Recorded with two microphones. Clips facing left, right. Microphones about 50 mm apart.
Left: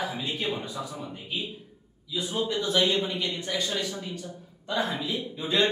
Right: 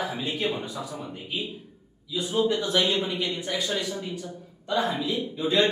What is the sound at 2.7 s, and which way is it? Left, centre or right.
Speech, centre.